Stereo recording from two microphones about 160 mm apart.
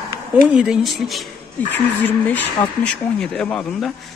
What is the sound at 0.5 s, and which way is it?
Speech, 5° right (ahead or behind).